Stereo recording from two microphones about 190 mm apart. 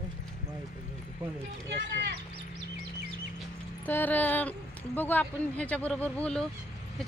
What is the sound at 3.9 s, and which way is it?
Speech, 10° left (ahead or behind).